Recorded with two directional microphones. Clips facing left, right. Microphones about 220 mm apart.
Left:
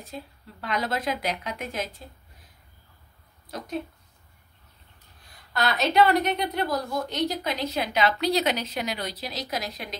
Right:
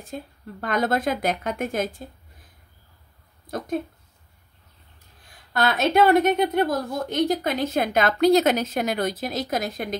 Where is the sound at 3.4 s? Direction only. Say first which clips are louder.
Right 5 dB; 50° right (ahead or behind).